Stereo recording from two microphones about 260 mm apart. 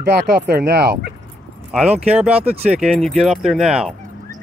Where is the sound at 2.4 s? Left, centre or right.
Right.